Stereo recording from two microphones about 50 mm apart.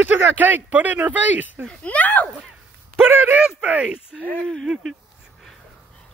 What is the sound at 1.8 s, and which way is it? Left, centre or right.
Speech, left.